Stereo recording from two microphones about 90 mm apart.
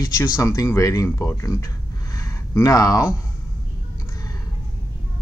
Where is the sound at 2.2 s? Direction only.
35° left (ahead or behind).